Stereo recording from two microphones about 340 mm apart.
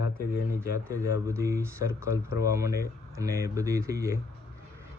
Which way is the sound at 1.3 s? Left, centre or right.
Centre.